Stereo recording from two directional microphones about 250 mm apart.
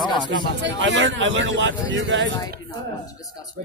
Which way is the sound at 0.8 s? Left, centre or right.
Right.